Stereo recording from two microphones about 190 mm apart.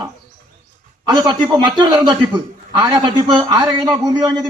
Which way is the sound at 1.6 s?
25° right (ahead or behind).